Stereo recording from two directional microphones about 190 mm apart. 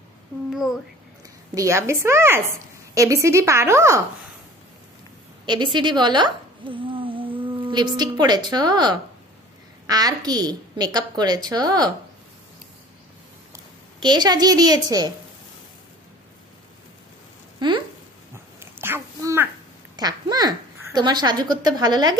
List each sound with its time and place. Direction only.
1.5 s a woman's voice: 15° right (ahead or behind)
5.4 s a woman's voice: 25° right (ahead or behind)
13.9 s a woman's voice: 25° right (ahead or behind)
17.6 s a sound: 25° right (ahead or behind)
18.6 s a sound: 10° right (ahead or behind)
20.0 s speech: 20° right (ahead or behind)